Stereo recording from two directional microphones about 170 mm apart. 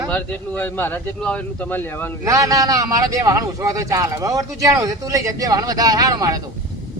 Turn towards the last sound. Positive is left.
turn(degrees=-20)  # may be behind; listen again after turning